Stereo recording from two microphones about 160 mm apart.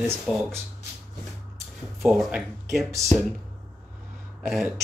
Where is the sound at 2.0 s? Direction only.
Centre (ahead or behind).